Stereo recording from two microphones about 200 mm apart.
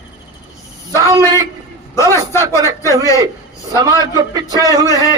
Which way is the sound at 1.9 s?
15° left (ahead or behind).